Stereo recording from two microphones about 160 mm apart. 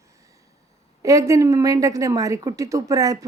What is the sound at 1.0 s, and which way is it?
A woman's voice, 20° right (ahead or behind).